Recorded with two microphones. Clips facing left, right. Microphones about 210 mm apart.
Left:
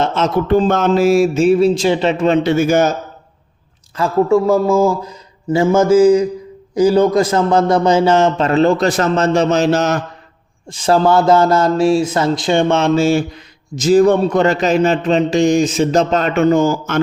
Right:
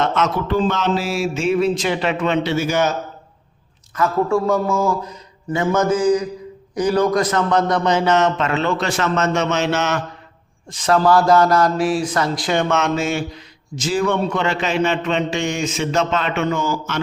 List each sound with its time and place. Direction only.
0.0 s a sound: 30° left (ahead or behind)
0.4 s a man's voice: 50° left (ahead or behind)
3.9 s a man's voice: 25° left (ahead or behind); by 17.0 s 50° left (ahead or behind)